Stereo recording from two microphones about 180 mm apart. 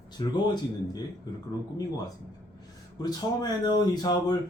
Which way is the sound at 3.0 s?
20° left (ahead or behind).